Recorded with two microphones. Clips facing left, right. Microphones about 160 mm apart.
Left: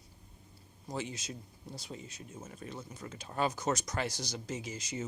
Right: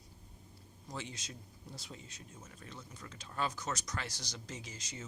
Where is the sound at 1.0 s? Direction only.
5° left (ahead or behind).